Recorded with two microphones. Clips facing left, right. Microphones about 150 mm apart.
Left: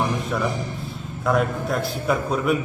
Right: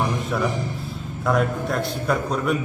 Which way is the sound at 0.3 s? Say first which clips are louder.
Right 1 dB; centre (ahead or behind).